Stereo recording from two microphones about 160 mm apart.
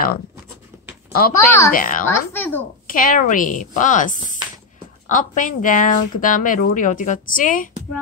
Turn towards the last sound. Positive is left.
turn(degrees=55)  # may be behind; listen again after turning